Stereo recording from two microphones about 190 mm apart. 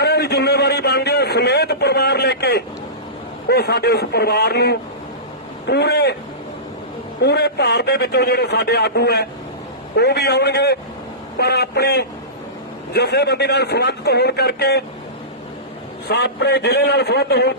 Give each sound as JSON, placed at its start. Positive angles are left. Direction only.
{"t": 0.0, "sound": "a man's voice", "side_deg": 60}
{"t": 7.2, "sound": "a man's voice", "side_deg": 60}
{"t": 16.0, "sound": "a man's voice", "side_deg": 60}